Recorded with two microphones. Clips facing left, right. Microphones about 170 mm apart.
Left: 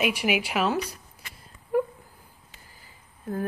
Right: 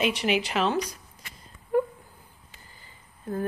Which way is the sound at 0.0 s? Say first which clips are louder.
Even; 10° left (ahead or behind).